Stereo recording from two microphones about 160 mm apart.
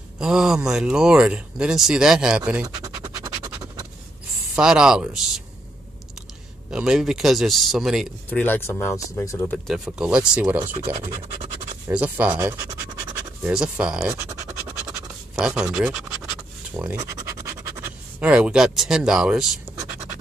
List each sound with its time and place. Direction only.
0.2 s speech: 5° right (ahead or behind)
2.6 s scratch: 20° right (ahead or behind)
4.6 s speech: 5° right (ahead or behind)
6.7 s speech: 5° right (ahead or behind)
8.3 s speech: 10° left (ahead or behind)
9.5 s speech: centre (ahead or behind)
15.3 s speech: 5° right (ahead or behind)
16.2 s scratch: 10° right (ahead or behind)
18.2 s speech: 5° right (ahead or behind)